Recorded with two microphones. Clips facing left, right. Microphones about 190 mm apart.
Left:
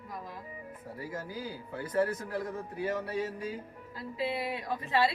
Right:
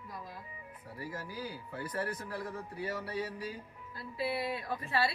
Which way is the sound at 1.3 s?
25° left (ahead or behind).